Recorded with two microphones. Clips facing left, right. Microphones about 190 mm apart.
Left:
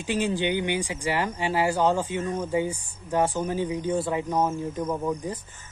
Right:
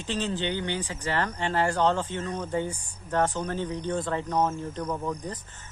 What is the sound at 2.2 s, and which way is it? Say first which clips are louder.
Speech: left 4 dB; 20° left (ahead or behind).